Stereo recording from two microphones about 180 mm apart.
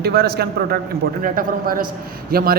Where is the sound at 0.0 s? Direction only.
60° right (ahead or behind).